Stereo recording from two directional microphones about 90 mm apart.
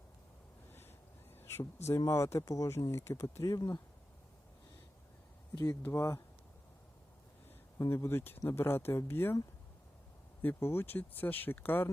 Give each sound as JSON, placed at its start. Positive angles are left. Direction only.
{"t": 1.4, "sound": "speech", "side_deg": 30}
{"t": 3.4, "sound": "speech", "side_deg": 40}
{"t": 5.6, "sound": "speech", "side_deg": 30}
{"t": 7.8, "sound": "speech", "side_deg": 30}
{"t": 10.4, "sound": "speech", "side_deg": 25}